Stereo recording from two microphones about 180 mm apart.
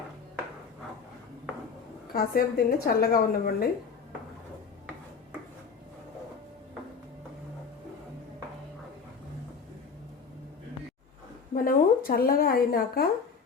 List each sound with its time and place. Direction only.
2.1 s a woman's voice: 60° left (ahead or behind)
11.5 s a woman's voice: 50° left (ahead or behind)